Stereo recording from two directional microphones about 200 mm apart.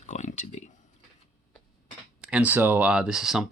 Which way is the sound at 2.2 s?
5° right (ahead or behind).